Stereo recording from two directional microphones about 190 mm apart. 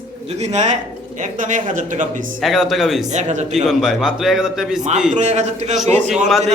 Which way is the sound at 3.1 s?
35° right (ahead or behind).